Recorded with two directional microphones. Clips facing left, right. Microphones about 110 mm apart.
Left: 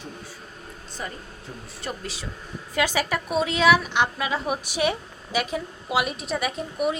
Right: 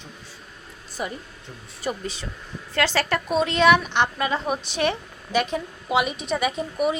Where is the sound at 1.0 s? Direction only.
15° right (ahead or behind).